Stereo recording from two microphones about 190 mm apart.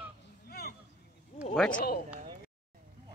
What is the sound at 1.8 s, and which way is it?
Speech, 55° left (ahead or behind).